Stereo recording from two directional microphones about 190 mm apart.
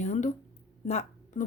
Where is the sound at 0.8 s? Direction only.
35° left (ahead or behind).